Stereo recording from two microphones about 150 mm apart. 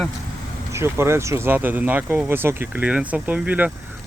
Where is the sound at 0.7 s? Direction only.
15° right (ahead or behind).